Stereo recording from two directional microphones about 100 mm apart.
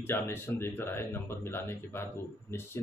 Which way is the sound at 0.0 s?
25° left (ahead or behind).